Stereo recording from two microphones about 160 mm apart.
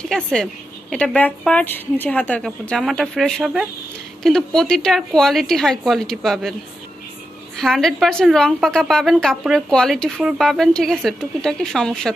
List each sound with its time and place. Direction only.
0.0 s a woman's voice: 5° left (ahead or behind)
7.5 s a woman's voice: centre (ahead or behind)